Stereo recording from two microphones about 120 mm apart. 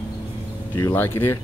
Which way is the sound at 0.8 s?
20° left (ahead or behind).